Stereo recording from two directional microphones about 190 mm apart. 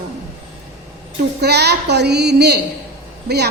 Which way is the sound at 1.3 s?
60° right (ahead or behind).